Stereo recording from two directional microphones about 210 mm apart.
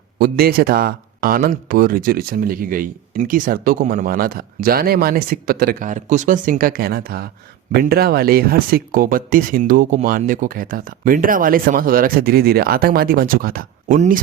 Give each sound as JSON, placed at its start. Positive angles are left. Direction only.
{"t": 0.2, "sound": "speech", "side_deg": -45}